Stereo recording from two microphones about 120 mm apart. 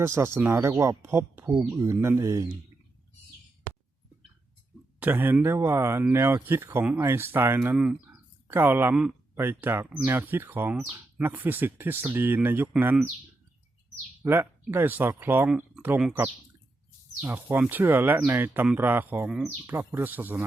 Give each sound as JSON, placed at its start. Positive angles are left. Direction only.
{"t": 0.0, "sound": "speech", "side_deg": -20}
{"t": 4.9, "sound": "speech", "side_deg": -15}
{"t": 14.2, "sound": "speech", "side_deg": -20}
{"t": 17.2, "sound": "speech", "side_deg": -15}
{"t": 19.3, "sound": "speech", "side_deg": -5}
{"t": 19.6, "sound": "speech", "side_deg": -20}